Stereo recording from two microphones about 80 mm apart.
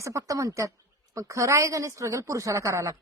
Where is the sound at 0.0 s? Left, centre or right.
Right.